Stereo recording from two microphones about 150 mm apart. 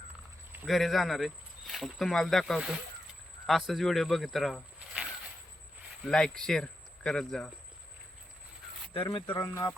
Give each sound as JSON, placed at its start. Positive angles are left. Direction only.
{"t": 0.6, "sound": "speech", "side_deg": 0}
{"t": 9.1, "sound": "speech", "side_deg": 35}
{"t": 9.4, "sound": "speech", "side_deg": 20}